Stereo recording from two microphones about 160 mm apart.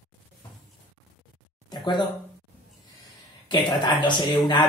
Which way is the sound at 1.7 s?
25° left (ahead or behind).